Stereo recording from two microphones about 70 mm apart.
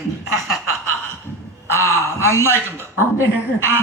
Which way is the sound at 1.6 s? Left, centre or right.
Left.